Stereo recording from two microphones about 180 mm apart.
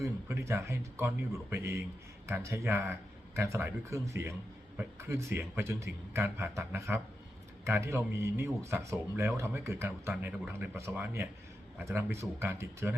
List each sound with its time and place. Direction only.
0.0 s speech: 15° right (ahead or behind)